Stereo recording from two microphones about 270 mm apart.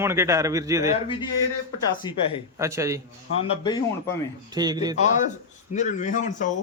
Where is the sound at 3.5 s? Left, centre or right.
Centre.